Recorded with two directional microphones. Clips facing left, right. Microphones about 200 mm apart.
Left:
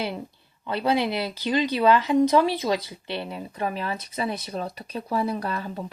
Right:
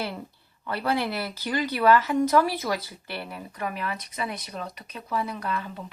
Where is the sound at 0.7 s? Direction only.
20° left (ahead or behind).